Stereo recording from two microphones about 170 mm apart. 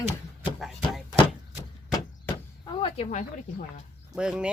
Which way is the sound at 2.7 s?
30° left (ahead or behind).